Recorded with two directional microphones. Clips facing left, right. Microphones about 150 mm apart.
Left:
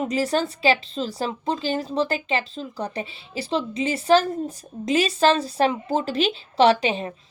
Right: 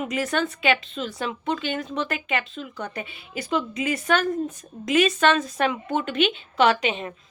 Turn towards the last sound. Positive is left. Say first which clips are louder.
# left 3 dB
turn(degrees=30)  # may be behind; listen again after turning